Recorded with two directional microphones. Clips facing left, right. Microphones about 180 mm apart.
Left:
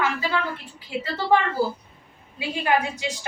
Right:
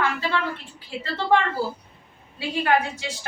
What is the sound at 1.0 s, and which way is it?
A woman's voice, 10° left (ahead or behind).